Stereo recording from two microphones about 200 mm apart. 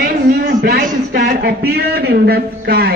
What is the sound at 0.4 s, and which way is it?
A man's voice, 45° right (ahead or behind).